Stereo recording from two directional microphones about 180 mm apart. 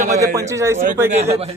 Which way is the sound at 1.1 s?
35° right (ahead or behind).